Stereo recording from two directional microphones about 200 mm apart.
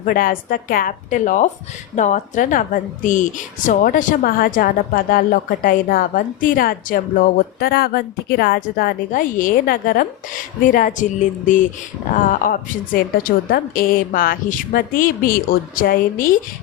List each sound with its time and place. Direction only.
0.0 s a woman's voice: 45° left (ahead or behind)